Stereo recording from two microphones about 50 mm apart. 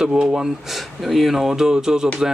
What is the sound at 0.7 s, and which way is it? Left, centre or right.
Speech, centre.